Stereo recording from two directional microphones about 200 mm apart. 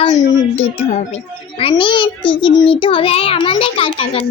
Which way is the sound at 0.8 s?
35° left (ahead or behind).